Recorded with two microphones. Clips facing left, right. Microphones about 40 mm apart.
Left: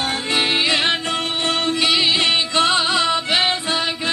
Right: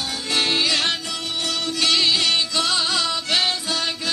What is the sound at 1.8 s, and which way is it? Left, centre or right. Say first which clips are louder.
Music: even; centre.